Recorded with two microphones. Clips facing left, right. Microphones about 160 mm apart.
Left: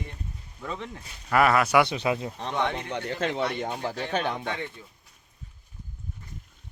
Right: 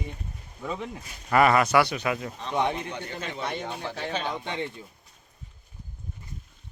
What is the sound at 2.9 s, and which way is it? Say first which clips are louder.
Speech: left 6 dB; 75° left (ahead or behind).